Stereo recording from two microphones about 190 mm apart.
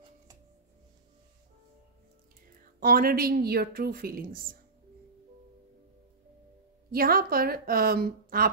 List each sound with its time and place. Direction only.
2.8 s a woman's voice: 50° right (ahead or behind)
6.9 s a woman's voice: 50° right (ahead or behind)